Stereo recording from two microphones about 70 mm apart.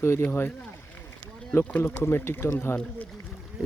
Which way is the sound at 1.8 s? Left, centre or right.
Left.